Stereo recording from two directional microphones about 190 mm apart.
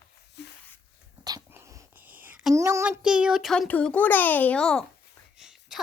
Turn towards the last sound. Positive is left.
turn(degrees=0)  # may be behind; listen again after turning